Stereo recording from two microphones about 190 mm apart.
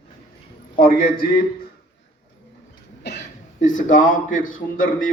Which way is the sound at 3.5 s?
40° left (ahead or behind).